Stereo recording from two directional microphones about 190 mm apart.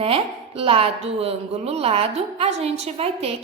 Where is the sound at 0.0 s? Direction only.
30° right (ahead or behind).